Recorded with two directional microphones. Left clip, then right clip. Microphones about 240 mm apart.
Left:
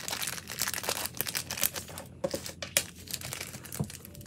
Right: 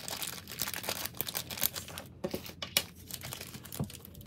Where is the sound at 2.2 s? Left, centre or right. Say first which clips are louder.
Left 5 dB; left.